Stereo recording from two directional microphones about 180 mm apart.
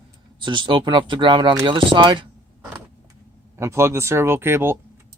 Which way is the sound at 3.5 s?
15° right (ahead or behind).